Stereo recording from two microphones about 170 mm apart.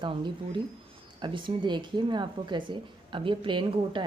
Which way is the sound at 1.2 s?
30° right (ahead or behind).